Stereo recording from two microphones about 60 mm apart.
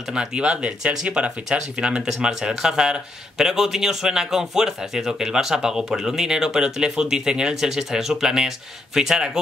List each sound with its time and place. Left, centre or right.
0.1 s speech: centre